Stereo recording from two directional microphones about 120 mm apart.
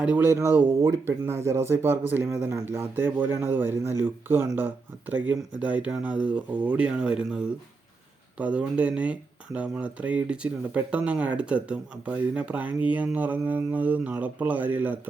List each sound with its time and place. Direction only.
0.0 s speech: 15° right (ahead or behind)